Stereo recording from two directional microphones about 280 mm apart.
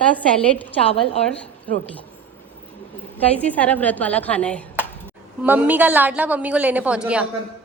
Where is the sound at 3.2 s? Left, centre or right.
Centre.